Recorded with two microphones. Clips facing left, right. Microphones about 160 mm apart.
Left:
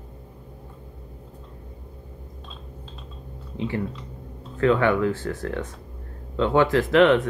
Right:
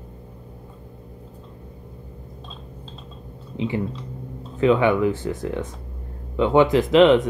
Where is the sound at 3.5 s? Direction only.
15° right (ahead or behind).